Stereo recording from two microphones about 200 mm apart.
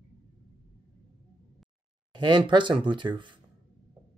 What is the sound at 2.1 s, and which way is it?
Speech, 20° right (ahead or behind).